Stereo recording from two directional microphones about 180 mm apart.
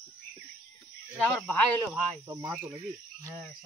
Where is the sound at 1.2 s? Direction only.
5° left (ahead or behind).